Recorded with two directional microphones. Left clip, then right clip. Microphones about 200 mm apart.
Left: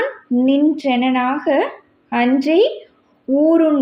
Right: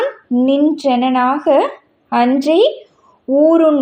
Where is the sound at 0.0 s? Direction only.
20° right (ahead or behind).